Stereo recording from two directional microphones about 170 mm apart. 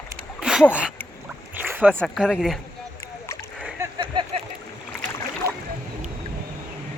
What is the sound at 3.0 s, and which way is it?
Splash, 15° left (ahead or behind).